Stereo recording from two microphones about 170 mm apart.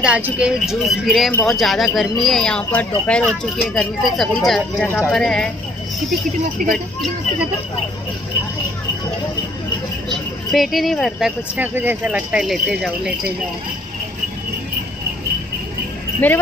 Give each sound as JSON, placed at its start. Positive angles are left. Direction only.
{"t": 0.0, "sound": "speech", "side_deg": -5}
{"t": 1.3, "sound": "speech", "side_deg": 10}
{"t": 1.6, "sound": "speech", "side_deg": 0}
{"t": 6.6, "sound": "speech", "side_deg": -55}
{"t": 10.0, "sound": "speech", "side_deg": 0}
{"t": 16.2, "sound": "speech", "side_deg": 10}